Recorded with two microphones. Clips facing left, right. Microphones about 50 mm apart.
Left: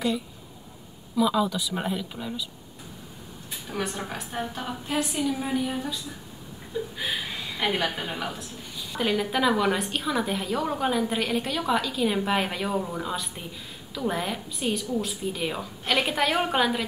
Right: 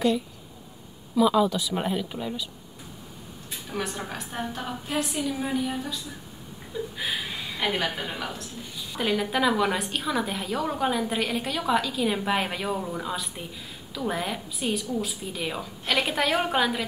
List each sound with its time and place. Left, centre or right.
1.1 s speech: centre
3.7 s a woman's voice: centre
7.0 s a woman's voice: centre